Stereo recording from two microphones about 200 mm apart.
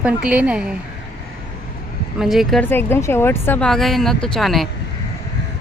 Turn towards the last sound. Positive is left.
turn(degrees=0)  # may be behind; listen again after turning